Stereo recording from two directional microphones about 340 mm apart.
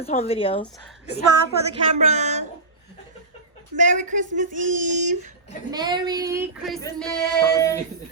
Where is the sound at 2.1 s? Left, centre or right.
Centre.